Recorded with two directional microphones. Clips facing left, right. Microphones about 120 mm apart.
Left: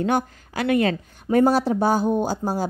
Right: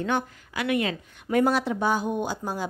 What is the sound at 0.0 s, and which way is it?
A woman's voice, 35° left (ahead or behind).